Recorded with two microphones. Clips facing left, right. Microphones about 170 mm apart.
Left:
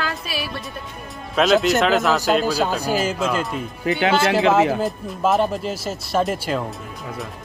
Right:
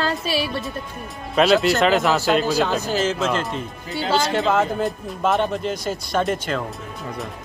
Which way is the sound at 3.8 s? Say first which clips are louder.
Left 7 dB; 75° left (ahead or behind).